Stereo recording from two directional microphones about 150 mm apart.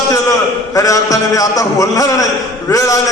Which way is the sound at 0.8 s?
20° left (ahead or behind).